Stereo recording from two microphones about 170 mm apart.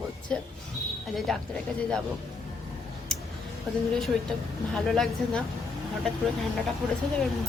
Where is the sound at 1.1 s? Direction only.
Centre (ahead or behind).